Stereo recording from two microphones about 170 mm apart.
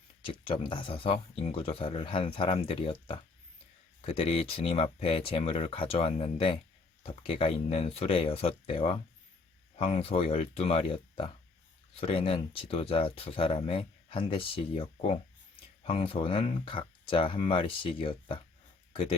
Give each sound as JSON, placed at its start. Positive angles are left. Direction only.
{"t": 0.2, "sound": "speech", "side_deg": 30}